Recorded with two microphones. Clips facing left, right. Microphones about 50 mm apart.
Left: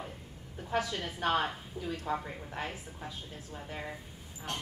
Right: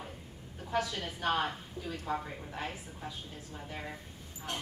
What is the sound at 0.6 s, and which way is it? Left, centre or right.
A woman's voice, centre.